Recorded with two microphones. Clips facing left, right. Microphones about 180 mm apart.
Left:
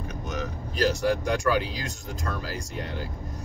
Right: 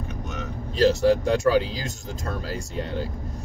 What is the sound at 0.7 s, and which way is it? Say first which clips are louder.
Speech: right 6 dB; 25° right (ahead or behind).